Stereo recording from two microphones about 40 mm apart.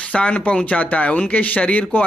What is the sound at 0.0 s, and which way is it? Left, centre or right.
Speech, left.